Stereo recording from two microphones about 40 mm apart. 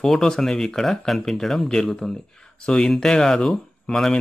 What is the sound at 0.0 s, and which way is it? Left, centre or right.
Speech, centre.